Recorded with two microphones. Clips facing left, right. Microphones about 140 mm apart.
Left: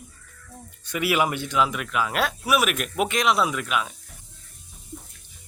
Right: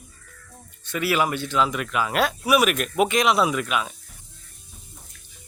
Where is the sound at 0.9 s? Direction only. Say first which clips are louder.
Even; 15° left (ahead or behind); by 3.9 s centre (ahead or behind).